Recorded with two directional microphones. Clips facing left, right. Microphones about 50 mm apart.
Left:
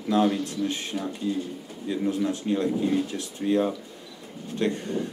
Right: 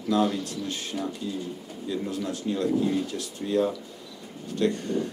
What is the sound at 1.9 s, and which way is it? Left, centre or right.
Speech, left.